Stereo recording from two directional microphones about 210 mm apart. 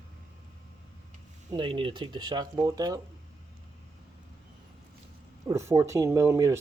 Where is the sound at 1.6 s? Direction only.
25° right (ahead or behind).